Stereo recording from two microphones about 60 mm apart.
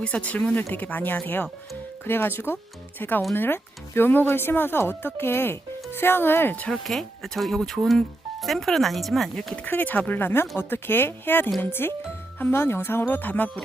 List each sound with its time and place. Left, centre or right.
0.0 s speech: left
6.7 s speech: centre
9.6 s speech: left